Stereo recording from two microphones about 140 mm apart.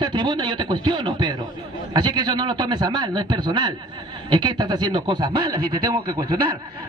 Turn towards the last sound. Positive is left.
turn(degrees=-30)  # may be behind; listen again after turning